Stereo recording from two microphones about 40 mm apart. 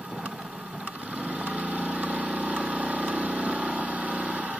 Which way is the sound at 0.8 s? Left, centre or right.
Right.